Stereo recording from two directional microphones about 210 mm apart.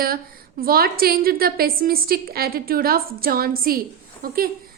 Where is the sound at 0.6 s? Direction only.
45° right (ahead or behind).